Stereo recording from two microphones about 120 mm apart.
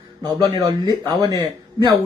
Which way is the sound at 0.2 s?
35° right (ahead or behind).